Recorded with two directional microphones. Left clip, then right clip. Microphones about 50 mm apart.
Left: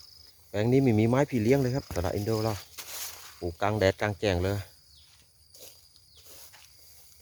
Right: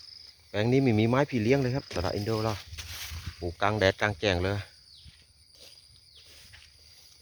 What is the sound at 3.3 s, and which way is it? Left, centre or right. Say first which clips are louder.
Speech: right 1 dB; centre.